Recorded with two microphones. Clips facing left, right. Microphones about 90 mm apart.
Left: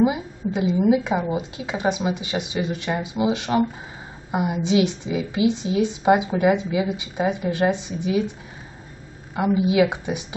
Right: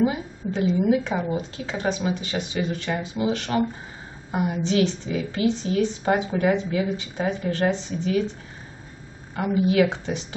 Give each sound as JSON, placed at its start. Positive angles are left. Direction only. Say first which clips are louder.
{"t": 0.0, "sound": "a woman's voice", "louder": "left 3 dB", "side_deg": 15}
{"t": 9.3, "sound": "a woman's voice", "louder": "left 2 dB", "side_deg": 15}